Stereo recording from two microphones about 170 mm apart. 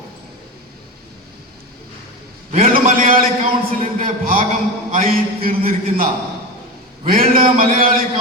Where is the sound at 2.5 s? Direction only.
50° right (ahead or behind).